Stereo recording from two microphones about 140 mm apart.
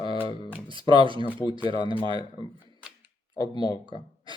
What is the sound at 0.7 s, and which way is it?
Speech, 35° right (ahead or behind).